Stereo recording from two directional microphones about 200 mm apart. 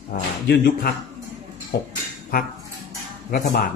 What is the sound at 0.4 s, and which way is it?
Speech, 50° left (ahead or behind).